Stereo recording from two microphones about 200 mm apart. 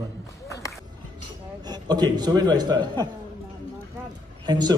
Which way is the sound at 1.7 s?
20° right (ahead or behind).